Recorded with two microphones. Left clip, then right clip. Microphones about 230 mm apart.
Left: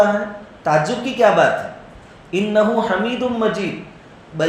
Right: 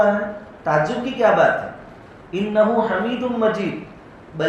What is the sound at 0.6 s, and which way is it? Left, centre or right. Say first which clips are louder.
A man's voice: left 2 dB; left.